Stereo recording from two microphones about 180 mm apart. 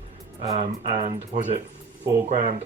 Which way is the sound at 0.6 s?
40° right (ahead or behind).